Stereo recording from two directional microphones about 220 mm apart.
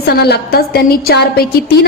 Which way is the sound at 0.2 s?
45° left (ahead or behind).